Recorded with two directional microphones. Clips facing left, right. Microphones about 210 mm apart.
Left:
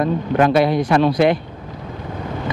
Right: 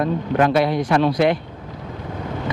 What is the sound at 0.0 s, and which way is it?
A man's voice, 15° left (ahead or behind).